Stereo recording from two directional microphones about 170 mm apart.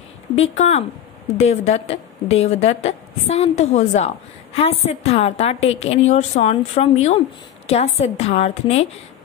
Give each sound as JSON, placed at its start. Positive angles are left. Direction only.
{"t": 0.4, "sound": "a woman's voice", "side_deg": 40}